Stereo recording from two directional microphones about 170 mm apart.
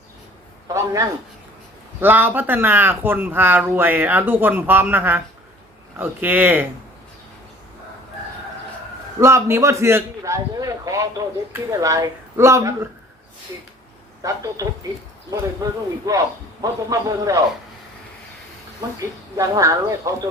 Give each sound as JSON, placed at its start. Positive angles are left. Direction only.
{"t": 0.7, "sound": "speech", "side_deg": -15}
{"t": 9.2, "sound": "a man's voice", "side_deg": -15}
{"t": 14.2, "sound": "a man's voice", "side_deg": -20}
{"t": 18.9, "sound": "a man's voice", "side_deg": -20}